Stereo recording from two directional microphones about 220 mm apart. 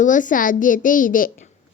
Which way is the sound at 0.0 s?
35° left (ahead or behind).